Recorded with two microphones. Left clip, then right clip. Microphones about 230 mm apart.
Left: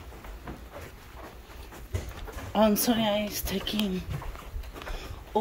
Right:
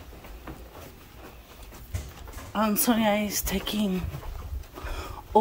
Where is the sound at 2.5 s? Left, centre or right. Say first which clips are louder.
Left 1 dB; centre.